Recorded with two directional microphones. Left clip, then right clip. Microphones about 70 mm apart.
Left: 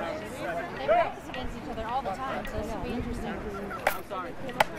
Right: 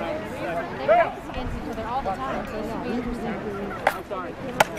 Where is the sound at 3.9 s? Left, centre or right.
Left.